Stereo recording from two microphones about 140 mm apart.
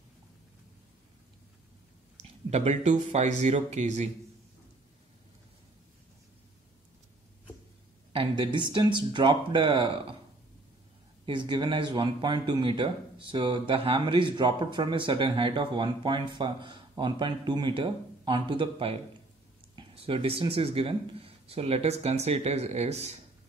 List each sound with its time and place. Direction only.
2.5 s speech: 55° right (ahead or behind)
8.1 s speech: 40° right (ahead or behind)
11.2 s speech: 35° right (ahead or behind); by 23.1 s 50° right (ahead or behind)